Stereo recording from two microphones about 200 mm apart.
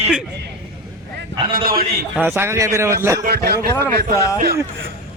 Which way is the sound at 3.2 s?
50° right (ahead or behind).